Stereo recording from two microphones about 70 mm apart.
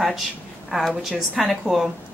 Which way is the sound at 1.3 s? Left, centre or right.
Centre.